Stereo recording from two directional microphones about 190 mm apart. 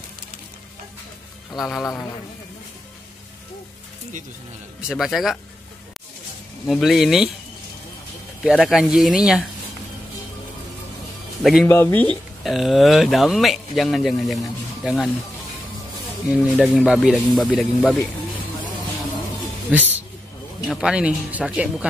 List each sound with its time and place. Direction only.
1.5 s speech: centre (ahead or behind)
4.8 s speech: centre (ahead or behind)
6.6 s speech: centre (ahead or behind)
8.5 s speech: 5° right (ahead or behind)
11.6 s speech: 10° left (ahead or behind)
12.4 s speech: centre (ahead or behind)
16.3 s speech: centre (ahead or behind)
19.7 s a sound: 10° right (ahead or behind)
20.6 s speech: 5° right (ahead or behind)